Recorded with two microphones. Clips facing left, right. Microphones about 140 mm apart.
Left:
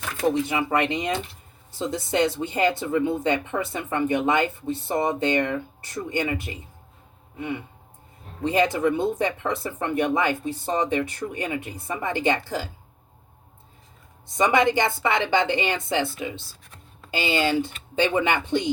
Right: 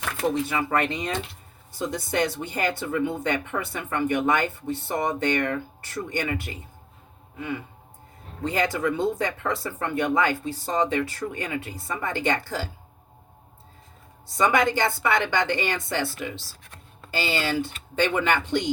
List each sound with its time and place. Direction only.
0.4 s speech: 20° left (ahead or behind)
14.3 s speech: 20° left (ahead or behind)